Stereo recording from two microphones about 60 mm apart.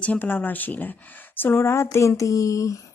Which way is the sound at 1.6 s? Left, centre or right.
Left.